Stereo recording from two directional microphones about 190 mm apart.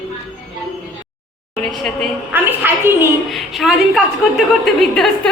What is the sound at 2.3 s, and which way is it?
A woman's voice, 10° right (ahead or behind).